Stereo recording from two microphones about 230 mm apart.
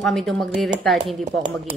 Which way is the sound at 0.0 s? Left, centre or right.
Centre.